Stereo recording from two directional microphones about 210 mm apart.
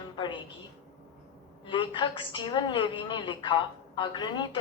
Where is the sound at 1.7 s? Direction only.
20° left (ahead or behind).